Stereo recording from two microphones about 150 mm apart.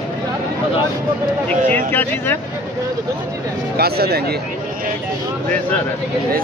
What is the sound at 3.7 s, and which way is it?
Speech, 90° right.